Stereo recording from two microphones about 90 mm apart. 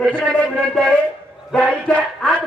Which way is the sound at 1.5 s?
10° left (ahead or behind).